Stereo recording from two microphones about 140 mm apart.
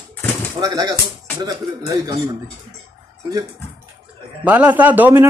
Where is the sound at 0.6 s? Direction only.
25° right (ahead or behind).